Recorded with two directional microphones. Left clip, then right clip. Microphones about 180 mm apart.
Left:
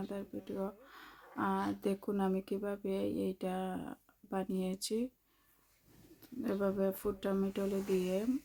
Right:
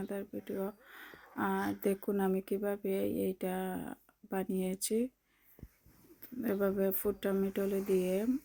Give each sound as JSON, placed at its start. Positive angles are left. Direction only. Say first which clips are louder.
{"t": 0.0, "sound": "speech", "louder": "right 2 dB", "side_deg": -10}
{"t": 6.2, "sound": "speech", "louder": "right 2 dB", "side_deg": -15}